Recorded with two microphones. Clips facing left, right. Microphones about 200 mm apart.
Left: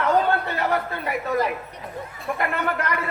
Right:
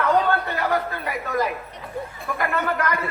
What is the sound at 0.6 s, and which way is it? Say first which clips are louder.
Speech: even; 30° left (ahead or behind).